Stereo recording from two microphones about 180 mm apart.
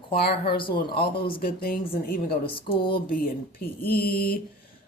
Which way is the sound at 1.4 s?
55° left (ahead or behind).